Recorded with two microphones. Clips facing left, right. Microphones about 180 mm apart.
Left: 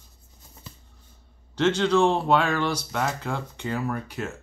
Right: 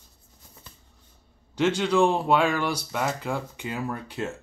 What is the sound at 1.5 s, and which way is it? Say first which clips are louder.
Speech: left 1 dB; 15° right (ahead or behind).